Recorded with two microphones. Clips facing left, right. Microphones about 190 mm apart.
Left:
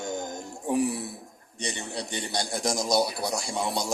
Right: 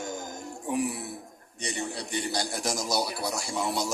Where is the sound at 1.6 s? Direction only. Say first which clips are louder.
Even; 25° left (ahead or behind).